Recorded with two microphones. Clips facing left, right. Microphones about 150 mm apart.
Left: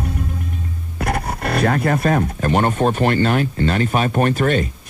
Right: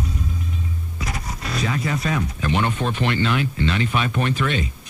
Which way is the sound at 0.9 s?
60° left (ahead or behind).